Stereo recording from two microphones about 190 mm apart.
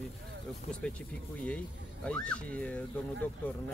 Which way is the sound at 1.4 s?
5° left (ahead or behind).